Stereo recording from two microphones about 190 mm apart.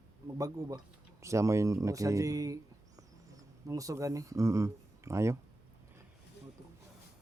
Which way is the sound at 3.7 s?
15° right (ahead or behind).